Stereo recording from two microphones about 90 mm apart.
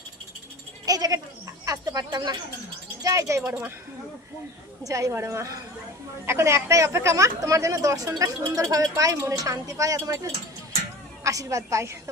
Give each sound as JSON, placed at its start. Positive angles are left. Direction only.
{"t": 0.9, "sound": "goat", "side_deg": -45}
{"t": 3.0, "sound": "a woman's voice", "side_deg": -40}
{"t": 4.8, "sound": "a woman's voice", "side_deg": -40}
{"t": 11.2, "sound": "a woman's voice", "side_deg": -35}